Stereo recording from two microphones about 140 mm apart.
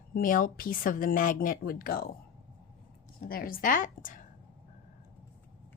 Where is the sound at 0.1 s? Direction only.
80° left.